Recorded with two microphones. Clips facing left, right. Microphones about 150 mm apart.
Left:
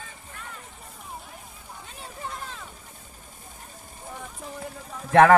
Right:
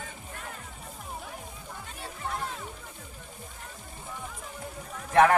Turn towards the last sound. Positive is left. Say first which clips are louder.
# left 5 dB
turn(degrees=90)